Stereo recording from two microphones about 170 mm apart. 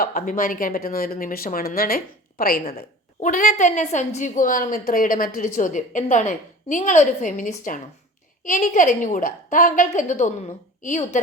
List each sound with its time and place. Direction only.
0.0 s speech: 55° left (ahead or behind)
3.2 s a woman's voice: 50° left (ahead or behind)